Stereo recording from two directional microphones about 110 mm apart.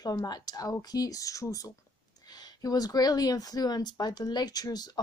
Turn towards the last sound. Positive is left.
turn(degrees=35)  # may be behind; listen again after turning